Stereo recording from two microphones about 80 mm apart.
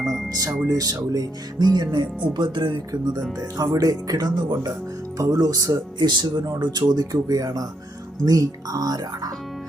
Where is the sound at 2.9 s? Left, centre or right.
Right.